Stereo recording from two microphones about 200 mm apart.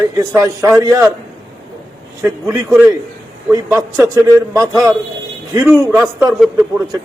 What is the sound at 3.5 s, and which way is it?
A man's voice, 15° right (ahead or behind).